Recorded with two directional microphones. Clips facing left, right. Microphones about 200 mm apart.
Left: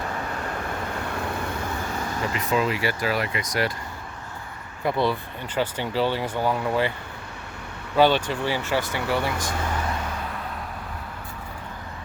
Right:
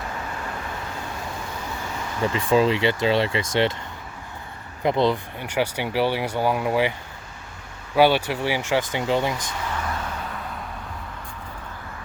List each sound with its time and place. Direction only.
2.2 s speech: 30° right (ahead or behind)
4.8 s speech: 20° right (ahead or behind)
7.9 s speech: 10° right (ahead or behind)